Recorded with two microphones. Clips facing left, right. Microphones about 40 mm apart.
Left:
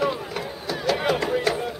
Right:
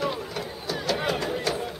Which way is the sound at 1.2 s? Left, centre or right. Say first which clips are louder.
Left 4 dB; left.